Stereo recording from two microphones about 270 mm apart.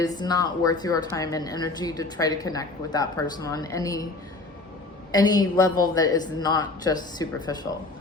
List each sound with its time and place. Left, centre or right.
0.0 s speech: centre
5.1 s speech: centre